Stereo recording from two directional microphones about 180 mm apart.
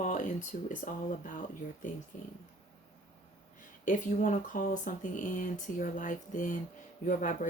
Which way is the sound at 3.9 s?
45° left (ahead or behind).